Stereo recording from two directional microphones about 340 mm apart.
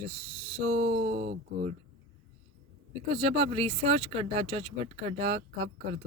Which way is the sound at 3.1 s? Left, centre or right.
Centre.